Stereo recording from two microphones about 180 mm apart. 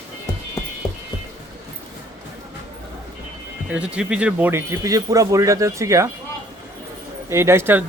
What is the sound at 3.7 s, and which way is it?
Speech, 5° right (ahead or behind).